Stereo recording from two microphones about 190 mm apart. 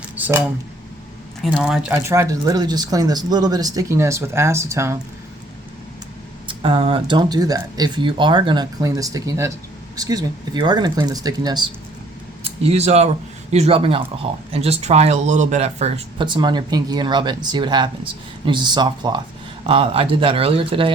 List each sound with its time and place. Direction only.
0.2 s speech: 10° right (ahead or behind)
6.5 s speech: 25° right (ahead or behind)
12.4 s speech: 30° right (ahead or behind)